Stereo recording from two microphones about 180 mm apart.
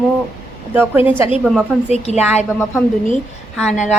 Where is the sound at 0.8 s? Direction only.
10° right (ahead or behind).